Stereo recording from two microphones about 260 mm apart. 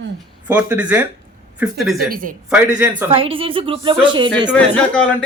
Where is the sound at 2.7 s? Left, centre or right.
Centre.